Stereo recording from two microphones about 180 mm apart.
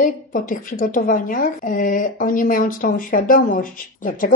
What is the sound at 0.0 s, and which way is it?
A woman's voice, 50° left (ahead or behind).